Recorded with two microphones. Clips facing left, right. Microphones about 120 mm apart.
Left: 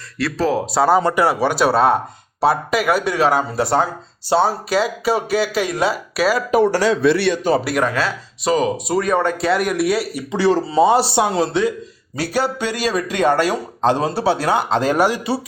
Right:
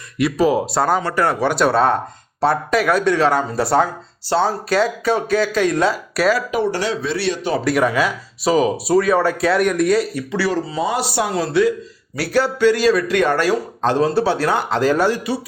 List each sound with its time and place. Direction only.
0.2 s speech: 15° right (ahead or behind)
4.3 s a man's voice: 15° left (ahead or behind)
6.5 s speech: 40° left (ahead or behind)
7.0 s a man's voice: 60° left (ahead or behind)
7.6 s speech: 5° left (ahead or behind)
7.9 s speech: 10° right (ahead or behind); by 10.2 s 5° left (ahead or behind)
10.3 s a man's voice: 25° left (ahead or behind)